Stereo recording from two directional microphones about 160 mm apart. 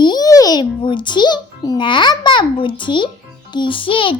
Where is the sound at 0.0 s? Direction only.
25° left (ahead or behind).